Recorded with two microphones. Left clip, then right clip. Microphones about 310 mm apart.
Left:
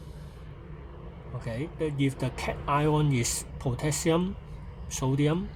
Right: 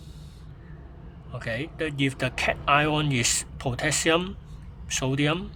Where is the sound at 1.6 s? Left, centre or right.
Right.